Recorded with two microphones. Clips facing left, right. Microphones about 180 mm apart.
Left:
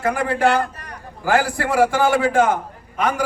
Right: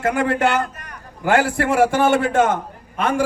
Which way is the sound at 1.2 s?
25° right (ahead or behind).